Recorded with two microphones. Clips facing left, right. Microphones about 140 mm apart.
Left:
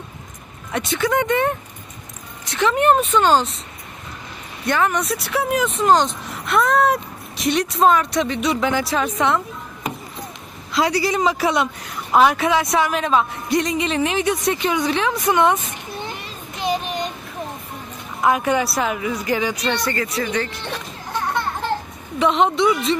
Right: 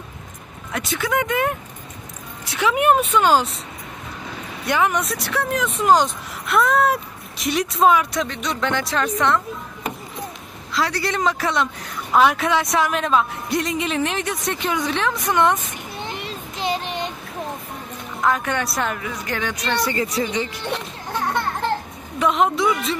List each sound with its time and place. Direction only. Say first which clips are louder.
0.7 s a woman's voice: left 3 dB; centre (ahead or behind)
4.6 s a woman's voice: even; 10° right (ahead or behind)
5.0 s speech: left 2 dB; 5° left (ahead or behind)
5.8 s speech: right 1 dB; 10° right (ahead or behind)
10.7 s a man's voice: left 4 dB; 15° left (ahead or behind)
11.0 s speech: left 3 dB; 5° left (ahead or behind)
16.5 s child singing: left 2 dB; 25° right (ahead or behind)
18.2 s speech: left 3 dB; 10° left (ahead or behind)
20.2 s speech: left 1 dB; 20° right (ahead or behind)
22.2 s speech: left 2 dB; centre (ahead or behind)